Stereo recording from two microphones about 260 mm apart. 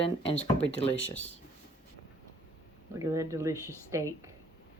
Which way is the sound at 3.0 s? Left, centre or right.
Centre.